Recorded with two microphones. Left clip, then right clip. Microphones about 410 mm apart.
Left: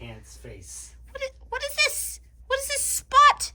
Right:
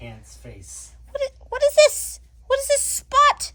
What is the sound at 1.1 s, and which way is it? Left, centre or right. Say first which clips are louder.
Speech: right 6 dB; centre.